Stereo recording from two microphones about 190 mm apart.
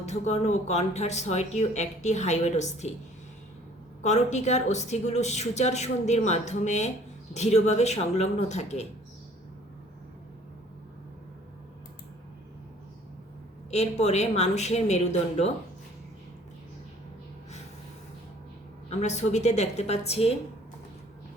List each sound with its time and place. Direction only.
0.0 s speech: 35° left (ahead or behind)
4.0 s speech: 35° left (ahead or behind)
13.7 s speech: 35° left (ahead or behind)
18.9 s speech: 35° left (ahead or behind)